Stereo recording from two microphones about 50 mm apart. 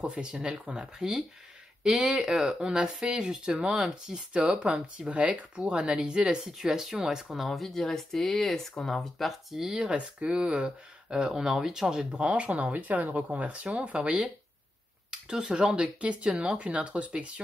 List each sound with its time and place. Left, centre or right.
0.0 s speech: centre
0.9 s speech: centre
7.4 s speech: centre
12.1 s speech: right